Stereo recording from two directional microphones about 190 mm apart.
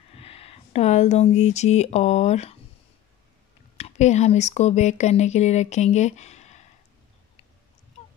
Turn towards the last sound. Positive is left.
turn(degrees=35)  # may be behind; listen again after turning